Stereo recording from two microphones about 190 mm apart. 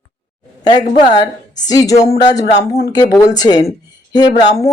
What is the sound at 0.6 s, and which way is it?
Speech, 20° left (ahead or behind).